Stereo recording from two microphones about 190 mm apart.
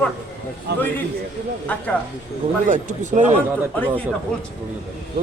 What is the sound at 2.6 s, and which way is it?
Speech, 40° right (ahead or behind).